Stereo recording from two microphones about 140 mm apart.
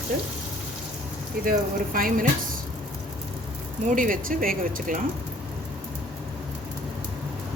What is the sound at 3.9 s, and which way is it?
Speech, 75° right (ahead or behind).